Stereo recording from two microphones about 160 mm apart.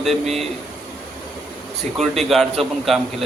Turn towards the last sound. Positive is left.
turn(degrees=0)  # may be behind; listen again after turning